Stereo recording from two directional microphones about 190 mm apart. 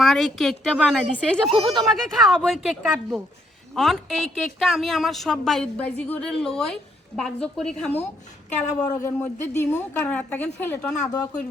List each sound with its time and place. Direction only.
0.0 s a woman's voice: centre (ahead or behind)
8.8 s a man's voice: 20° left (ahead or behind)
9.2 s a woman's voice: 10° left (ahead or behind)